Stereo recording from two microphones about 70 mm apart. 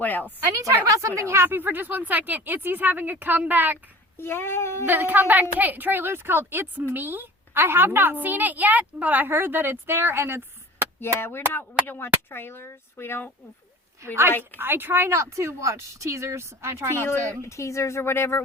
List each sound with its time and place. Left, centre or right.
0.0 s a woman's voice: left
0.5 s a woman's voice: right
4.2 s speech: left
4.9 s a woman's voice: right
11.2 s speech: left
14.6 s speech: right
17.4 s speech: left